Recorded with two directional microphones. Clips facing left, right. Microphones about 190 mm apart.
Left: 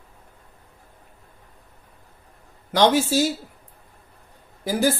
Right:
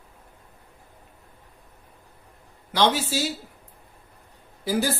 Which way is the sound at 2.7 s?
45° left (ahead or behind).